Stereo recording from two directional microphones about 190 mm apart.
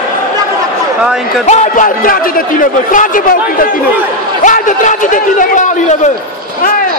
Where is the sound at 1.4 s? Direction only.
40° left (ahead or behind).